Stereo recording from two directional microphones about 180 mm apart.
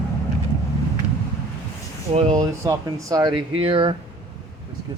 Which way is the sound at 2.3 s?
20° right (ahead or behind).